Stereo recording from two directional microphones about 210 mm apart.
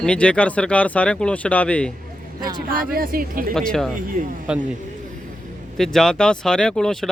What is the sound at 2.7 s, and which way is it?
Speech, 45° right (ahead or behind).